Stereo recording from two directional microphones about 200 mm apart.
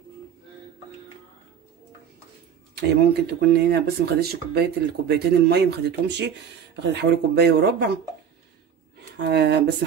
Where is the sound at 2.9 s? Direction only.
55° right (ahead or behind).